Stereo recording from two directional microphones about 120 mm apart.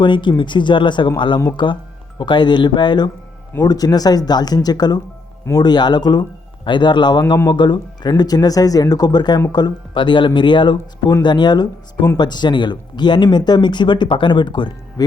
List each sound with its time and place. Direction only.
0.0 s speech: 40° left (ahead or behind)